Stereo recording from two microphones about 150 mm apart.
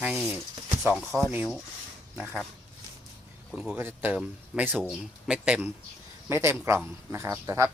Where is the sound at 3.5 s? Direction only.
5° right (ahead or behind).